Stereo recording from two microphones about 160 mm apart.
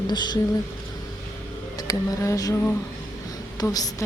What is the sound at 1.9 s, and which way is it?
Speech, 20° left (ahead or behind).